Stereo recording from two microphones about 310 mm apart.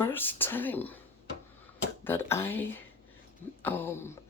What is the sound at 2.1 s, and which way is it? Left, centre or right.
Speech, centre.